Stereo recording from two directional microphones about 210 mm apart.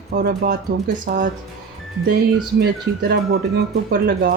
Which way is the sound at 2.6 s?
50° right (ahead or behind).